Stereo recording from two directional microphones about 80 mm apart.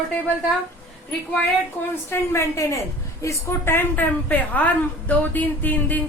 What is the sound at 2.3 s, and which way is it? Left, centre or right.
A woman's voice, left.